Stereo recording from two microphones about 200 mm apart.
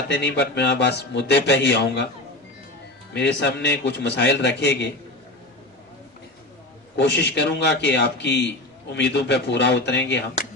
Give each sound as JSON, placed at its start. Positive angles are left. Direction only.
{"t": 0.1, "sound": "a man's voice", "side_deg": 60}
{"t": 3.1, "sound": "a man's voice", "side_deg": 60}
{"t": 6.9, "sound": "a man's voice", "side_deg": 60}